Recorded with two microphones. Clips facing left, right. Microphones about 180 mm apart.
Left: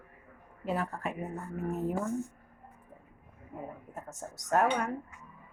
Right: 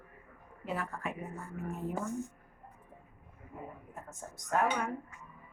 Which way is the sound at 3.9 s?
45° left (ahead or behind).